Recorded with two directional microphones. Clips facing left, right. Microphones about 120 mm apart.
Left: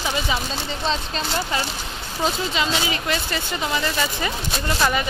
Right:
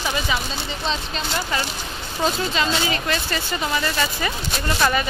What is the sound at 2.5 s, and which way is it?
Speech, 15° left (ahead or behind).